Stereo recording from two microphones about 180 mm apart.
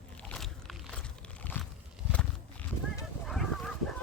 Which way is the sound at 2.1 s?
5° left (ahead or behind).